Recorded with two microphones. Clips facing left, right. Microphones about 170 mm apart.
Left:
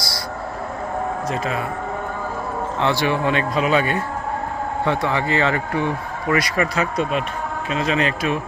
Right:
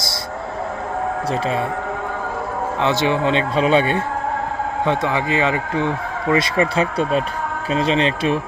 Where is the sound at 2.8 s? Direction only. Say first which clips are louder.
Right 2 dB; 20° right (ahead or behind).